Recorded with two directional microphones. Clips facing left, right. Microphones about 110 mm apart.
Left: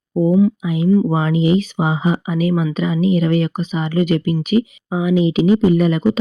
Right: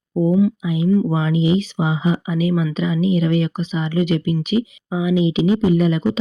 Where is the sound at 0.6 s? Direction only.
50° left (ahead or behind).